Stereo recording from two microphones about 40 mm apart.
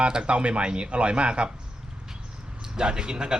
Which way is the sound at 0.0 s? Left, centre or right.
Right.